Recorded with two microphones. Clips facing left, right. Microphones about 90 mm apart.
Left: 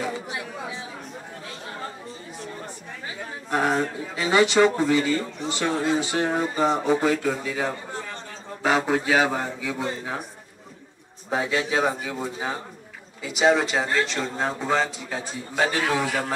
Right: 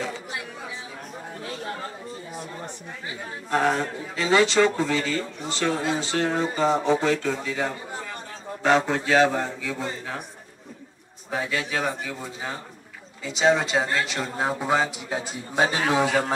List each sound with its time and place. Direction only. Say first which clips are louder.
3.4 s a man's voice: even; 10° left (ahead or behind)
11.2 s a man's voice: left 3 dB; 20° left (ahead or behind)
13.2 s speech: left 1 dB; 5° left (ahead or behind); by 16.3 s 20° right (ahead or behind)